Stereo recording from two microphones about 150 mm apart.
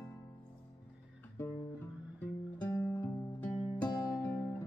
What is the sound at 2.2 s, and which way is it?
Music, 15° left (ahead or behind).